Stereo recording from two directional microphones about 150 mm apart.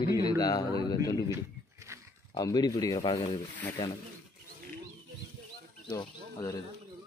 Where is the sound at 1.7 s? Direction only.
20° right (ahead or behind).